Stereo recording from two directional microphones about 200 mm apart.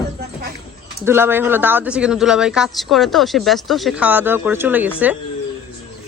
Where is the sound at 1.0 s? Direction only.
10° right (ahead or behind).